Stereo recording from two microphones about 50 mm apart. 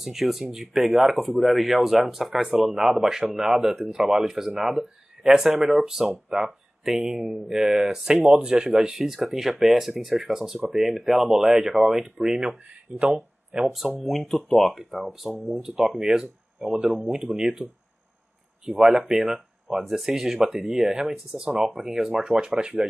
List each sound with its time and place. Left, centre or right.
0.0 s speech: centre
18.7 s speech: centre
22.3 s speech: centre